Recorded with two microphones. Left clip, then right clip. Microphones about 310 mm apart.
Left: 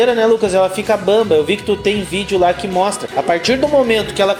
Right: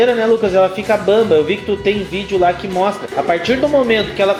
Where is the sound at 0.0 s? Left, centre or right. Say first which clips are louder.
Even; left.